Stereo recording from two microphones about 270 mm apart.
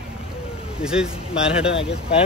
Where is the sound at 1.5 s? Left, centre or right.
Left.